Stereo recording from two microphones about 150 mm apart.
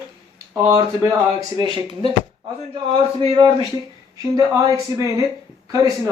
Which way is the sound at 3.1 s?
35° right (ahead or behind).